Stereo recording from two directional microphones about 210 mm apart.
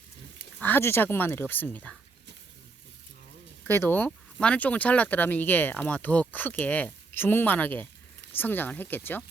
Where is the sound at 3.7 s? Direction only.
10° left (ahead or behind).